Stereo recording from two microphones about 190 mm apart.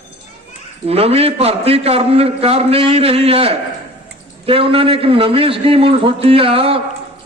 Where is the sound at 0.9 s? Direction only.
30° right (ahead or behind).